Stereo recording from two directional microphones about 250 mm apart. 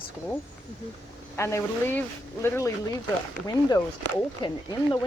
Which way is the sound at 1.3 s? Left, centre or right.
Centre.